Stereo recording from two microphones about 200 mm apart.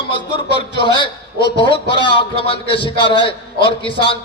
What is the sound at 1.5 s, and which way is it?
A man's voice, 25° left (ahead or behind).